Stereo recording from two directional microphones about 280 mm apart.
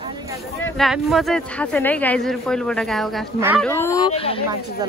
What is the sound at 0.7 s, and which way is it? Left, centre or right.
Speech, centre.